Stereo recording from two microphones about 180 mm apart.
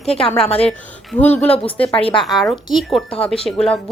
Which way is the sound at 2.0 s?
30° left (ahead or behind).